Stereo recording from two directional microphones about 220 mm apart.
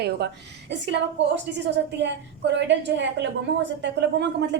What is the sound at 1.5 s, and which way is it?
Speech, 55° right (ahead or behind).